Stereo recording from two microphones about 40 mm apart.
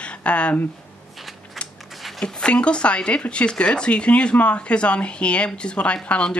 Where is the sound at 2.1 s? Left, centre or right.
Left.